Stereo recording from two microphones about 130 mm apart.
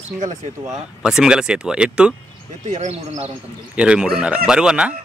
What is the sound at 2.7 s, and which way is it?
Speech, 65° right (ahead or behind).